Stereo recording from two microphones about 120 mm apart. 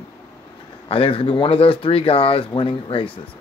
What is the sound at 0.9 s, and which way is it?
Speech, 50° left (ahead or behind).